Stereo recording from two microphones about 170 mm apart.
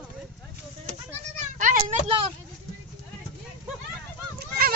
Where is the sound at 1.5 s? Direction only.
50° right (ahead or behind).